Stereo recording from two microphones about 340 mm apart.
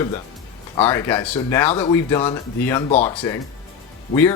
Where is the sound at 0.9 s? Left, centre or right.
Centre.